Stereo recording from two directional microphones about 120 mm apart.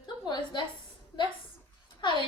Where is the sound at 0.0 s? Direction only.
40° left (ahead or behind).